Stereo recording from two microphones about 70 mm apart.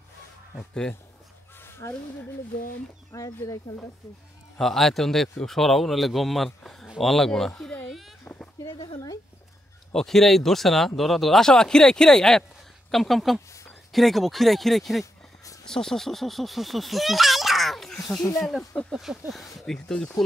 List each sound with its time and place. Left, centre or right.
0.6 s speech: centre
1.6 s a sound: left
3.1 s speech: left
4.6 s speech: centre
8.3 s speech: left
8.6 s speech: left
9.9 s speech: centre